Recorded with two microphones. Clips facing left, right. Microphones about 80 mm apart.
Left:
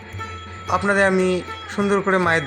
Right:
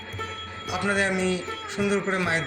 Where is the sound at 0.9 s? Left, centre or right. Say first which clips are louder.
Left 7 dB; left.